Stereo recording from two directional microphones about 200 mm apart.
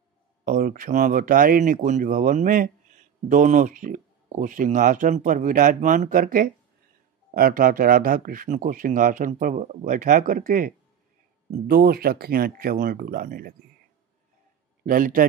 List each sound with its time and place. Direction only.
0.5 s speech: 40° right (ahead or behind)
11.7 s speech: 50° right (ahead or behind)
14.9 s speech: 45° right (ahead or behind)